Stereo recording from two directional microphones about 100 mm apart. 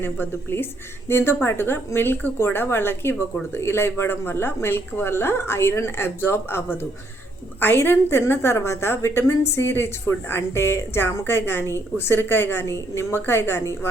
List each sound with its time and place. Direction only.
0.0 s a woman's voice: 20° left (ahead or behind)